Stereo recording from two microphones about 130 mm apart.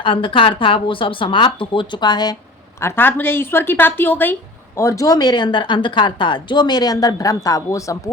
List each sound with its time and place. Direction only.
0.0 s a woman's voice: 40° left (ahead or behind)
2.8 s a woman's voice: 15° left (ahead or behind)